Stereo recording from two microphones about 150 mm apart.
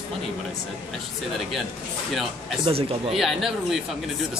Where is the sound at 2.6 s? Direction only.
40° right (ahead or behind).